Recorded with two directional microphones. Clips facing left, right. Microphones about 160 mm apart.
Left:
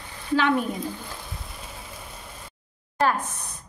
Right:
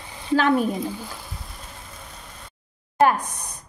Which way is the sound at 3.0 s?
15° right (ahead or behind).